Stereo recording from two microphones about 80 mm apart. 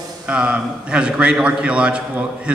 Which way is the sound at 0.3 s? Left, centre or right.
Centre.